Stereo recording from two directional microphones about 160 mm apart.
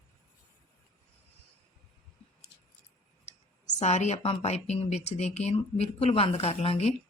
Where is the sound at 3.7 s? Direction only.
45° left (ahead or behind).